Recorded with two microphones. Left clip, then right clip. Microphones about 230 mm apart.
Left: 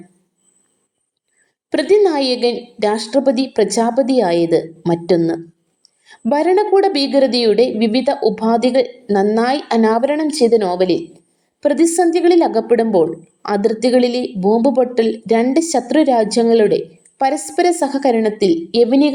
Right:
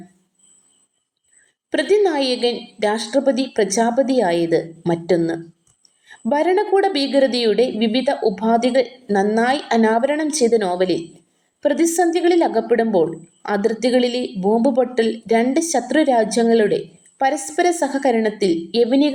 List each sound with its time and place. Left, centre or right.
2.0 s a woman's voice: left
11.7 s a woman's voice: left
11.9 s a woman's voice: left